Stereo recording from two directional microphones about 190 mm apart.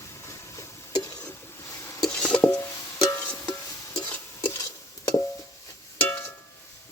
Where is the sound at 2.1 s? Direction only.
5° left (ahead or behind).